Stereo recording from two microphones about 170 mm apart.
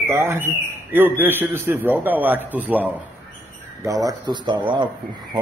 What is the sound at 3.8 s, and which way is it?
Speech, 20° right (ahead or behind).